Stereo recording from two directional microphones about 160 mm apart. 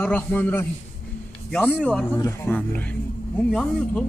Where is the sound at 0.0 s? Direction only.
10° left (ahead or behind).